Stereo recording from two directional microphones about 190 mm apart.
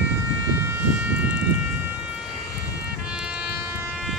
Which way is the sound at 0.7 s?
10° right (ahead or behind).